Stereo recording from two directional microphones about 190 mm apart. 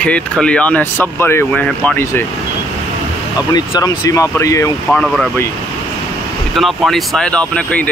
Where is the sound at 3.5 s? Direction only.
20° left (ahead or behind).